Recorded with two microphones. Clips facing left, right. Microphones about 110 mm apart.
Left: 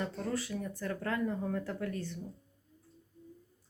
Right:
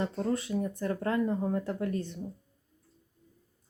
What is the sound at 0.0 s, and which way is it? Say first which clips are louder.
Speech: right 5 dB; 30° right (ahead or behind).